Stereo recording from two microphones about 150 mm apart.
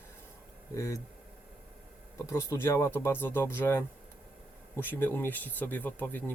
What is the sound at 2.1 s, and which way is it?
Speech, 20° left (ahead or behind).